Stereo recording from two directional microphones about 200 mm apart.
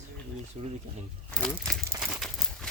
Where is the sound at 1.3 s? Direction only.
5° left (ahead or behind).